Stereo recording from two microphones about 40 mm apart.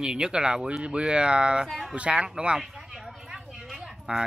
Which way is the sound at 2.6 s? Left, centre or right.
Centre.